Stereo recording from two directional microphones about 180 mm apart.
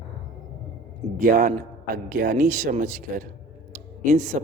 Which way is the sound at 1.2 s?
45° right (ahead or behind).